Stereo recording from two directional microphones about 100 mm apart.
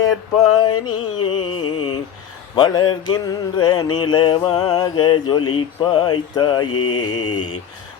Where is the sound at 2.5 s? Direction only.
45° left (ahead or behind).